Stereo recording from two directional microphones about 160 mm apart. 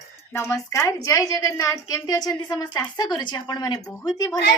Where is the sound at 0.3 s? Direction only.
15° left (ahead or behind).